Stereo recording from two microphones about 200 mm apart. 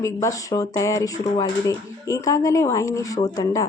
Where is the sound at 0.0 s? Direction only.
15° left (ahead or behind).